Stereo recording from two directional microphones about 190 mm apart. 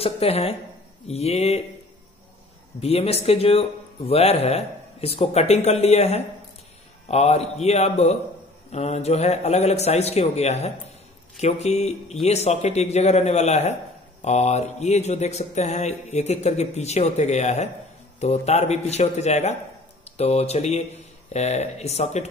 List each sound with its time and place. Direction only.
0.0 s speech: 30° left (ahead or behind)
2.8 s speech: 35° left (ahead or behind)